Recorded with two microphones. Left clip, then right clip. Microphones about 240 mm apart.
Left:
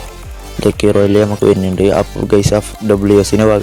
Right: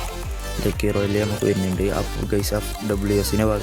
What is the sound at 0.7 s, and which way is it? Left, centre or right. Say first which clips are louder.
Speech: left 12 dB; right.